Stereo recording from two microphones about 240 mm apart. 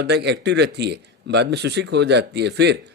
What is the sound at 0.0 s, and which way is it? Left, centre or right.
A man's voice, right.